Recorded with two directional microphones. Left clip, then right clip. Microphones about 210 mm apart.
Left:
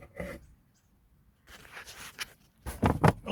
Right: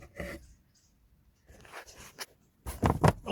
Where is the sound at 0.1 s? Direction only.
35° right (ahead or behind).